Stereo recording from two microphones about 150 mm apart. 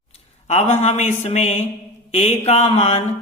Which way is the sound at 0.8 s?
50° left (ahead or behind).